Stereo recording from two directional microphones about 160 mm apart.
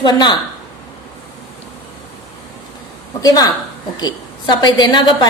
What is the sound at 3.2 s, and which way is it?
A woman's voice, 25° left (ahead or behind).